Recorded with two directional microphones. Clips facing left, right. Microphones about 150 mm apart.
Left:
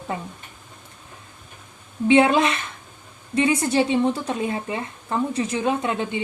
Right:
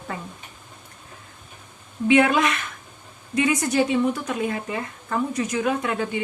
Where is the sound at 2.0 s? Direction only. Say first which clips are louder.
Left 2 dB; 25° left (ahead or behind).